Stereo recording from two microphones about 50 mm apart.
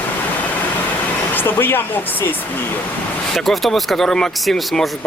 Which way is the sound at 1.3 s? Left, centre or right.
Left.